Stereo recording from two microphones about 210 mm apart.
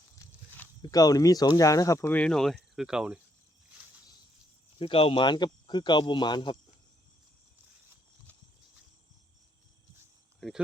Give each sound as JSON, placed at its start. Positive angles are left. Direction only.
{"t": 0.2, "sound": "a sound", "side_deg": 10}
{"t": 0.8, "sound": "speech", "side_deg": 15}
{"t": 4.8, "sound": "speech", "side_deg": 25}
{"t": 10.4, "sound": "speech", "side_deg": 0}